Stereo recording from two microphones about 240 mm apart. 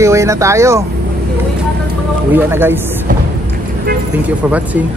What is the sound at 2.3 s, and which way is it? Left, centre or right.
Speech, centre.